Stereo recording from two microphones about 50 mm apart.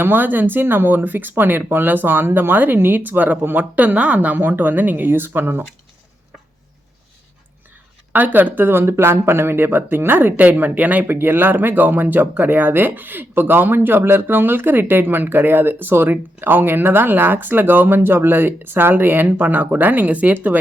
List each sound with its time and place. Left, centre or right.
0.0 s speech: right
4.4 s speech: right
8.1 s speech: right